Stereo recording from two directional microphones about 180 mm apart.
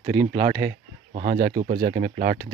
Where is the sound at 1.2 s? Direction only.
45° right (ahead or behind).